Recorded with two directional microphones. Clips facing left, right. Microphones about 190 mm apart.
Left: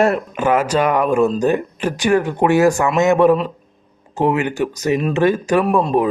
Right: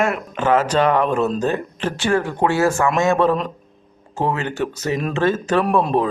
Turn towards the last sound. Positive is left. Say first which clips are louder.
# left 2 dB
turn(degrees=0)  # may be behind; listen again after turning